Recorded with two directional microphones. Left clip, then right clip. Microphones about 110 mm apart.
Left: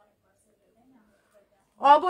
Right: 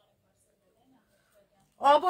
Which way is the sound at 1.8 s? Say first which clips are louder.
Left 4 dB; 30° left (ahead or behind).